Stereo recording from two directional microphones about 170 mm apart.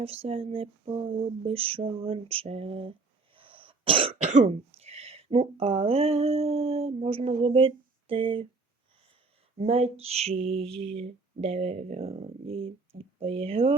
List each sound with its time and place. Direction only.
0.0 s speech: 35° right (ahead or behind)
3.3 s cough: 30° right (ahead or behind)
4.2 s speech: 40° right (ahead or behind)
9.6 s speech: 35° right (ahead or behind)
10.6 s lullaby: 5° left (ahead or behind)
10.8 s speech: 40° right (ahead or behind)